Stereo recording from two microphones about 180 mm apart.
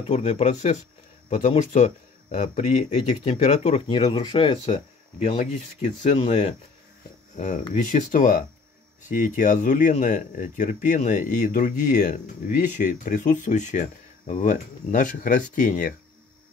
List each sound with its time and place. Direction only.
0.1 s speech: 40° left (ahead or behind)
4.0 s speech: 25° left (ahead or behind); by 15.9 s 50° left (ahead or behind)